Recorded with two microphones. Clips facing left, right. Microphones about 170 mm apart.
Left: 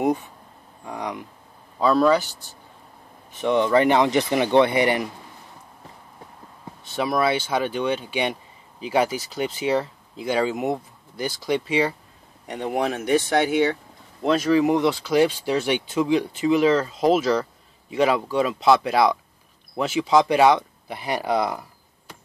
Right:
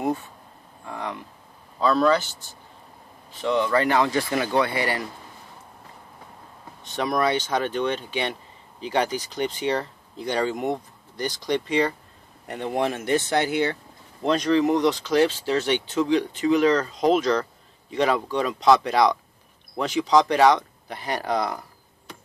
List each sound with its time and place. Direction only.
0.0 s a sound: 15° left (ahead or behind)
1.8 s speech: 10° left (ahead or behind)
3.3 s speech: 20° left (ahead or behind)
6.8 s speech: 5° left (ahead or behind)
14.2 s speech: 5° left (ahead or behind)